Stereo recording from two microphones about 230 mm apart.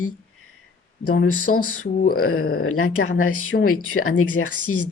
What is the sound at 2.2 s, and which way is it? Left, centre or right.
Speech, left.